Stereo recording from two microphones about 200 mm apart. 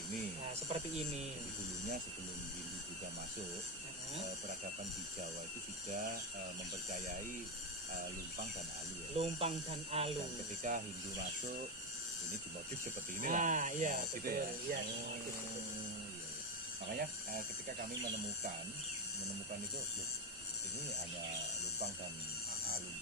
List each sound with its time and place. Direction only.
0.7 s speech: 35° right (ahead or behind)
9.1 s speech: 30° right (ahead or behind)
13.1 s speech: 40° right (ahead or behind)
16.9 s speech: 45° right (ahead or behind)